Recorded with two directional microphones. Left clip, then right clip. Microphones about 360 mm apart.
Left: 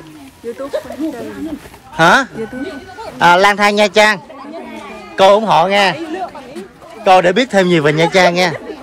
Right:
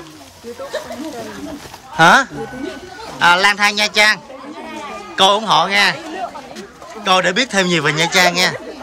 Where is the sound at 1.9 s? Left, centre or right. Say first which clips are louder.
Even; centre.